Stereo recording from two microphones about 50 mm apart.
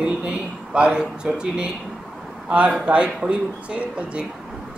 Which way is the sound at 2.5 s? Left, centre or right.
Right.